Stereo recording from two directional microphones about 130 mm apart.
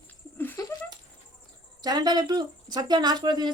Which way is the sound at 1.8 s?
30° right (ahead or behind).